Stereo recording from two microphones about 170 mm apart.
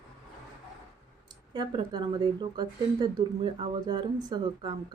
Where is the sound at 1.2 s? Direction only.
25° right (ahead or behind).